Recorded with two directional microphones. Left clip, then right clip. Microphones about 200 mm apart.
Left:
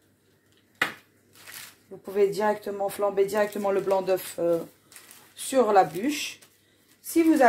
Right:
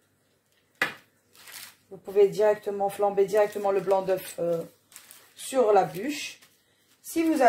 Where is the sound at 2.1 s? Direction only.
35° left (ahead or behind).